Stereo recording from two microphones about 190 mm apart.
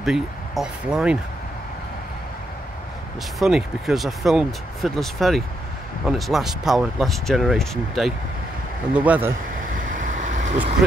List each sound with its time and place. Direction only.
0.0 s speech: 5° right (ahead or behind)
3.3 s speech: centre (ahead or behind)
9.8 s waves: 45° right (ahead or behind)